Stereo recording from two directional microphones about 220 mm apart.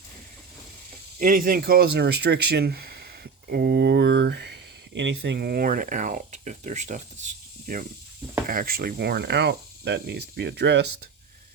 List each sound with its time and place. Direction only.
1.2 s speech: 40° right (ahead or behind)